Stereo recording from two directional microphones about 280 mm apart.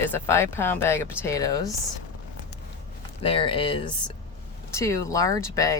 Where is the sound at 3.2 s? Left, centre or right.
Centre.